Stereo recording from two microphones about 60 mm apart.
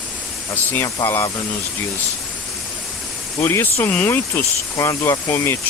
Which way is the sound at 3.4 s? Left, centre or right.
Left.